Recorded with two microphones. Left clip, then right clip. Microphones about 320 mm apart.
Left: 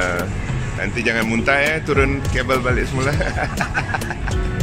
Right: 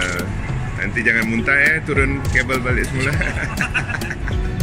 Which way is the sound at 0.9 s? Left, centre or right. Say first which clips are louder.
Right 3 dB; centre.